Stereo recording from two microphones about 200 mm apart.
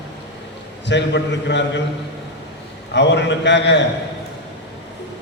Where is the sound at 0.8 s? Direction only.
60° left (ahead or behind).